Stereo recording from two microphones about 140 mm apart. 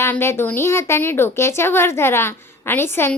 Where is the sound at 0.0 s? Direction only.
20° left (ahead or behind).